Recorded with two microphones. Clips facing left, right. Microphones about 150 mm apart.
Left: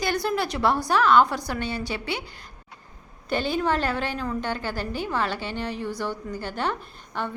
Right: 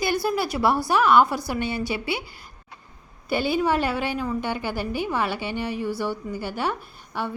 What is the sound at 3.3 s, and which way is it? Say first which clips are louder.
A woman's voice: right 2 dB; 10° right (ahead or behind).